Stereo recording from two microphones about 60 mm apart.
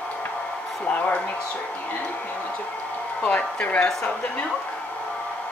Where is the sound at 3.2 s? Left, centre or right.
Left.